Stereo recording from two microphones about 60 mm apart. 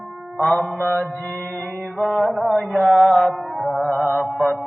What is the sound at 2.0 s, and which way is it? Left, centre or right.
Music, centre.